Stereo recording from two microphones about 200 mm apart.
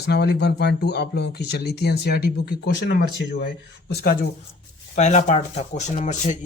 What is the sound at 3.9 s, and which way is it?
Speech, 50° left (ahead or behind).